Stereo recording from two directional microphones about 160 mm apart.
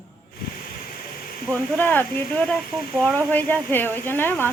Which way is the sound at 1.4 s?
10° left (ahead or behind).